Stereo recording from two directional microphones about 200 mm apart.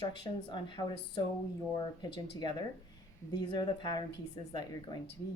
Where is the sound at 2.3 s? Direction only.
20° left (ahead or behind).